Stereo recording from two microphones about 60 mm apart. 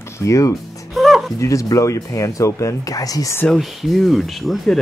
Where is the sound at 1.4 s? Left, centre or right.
Left.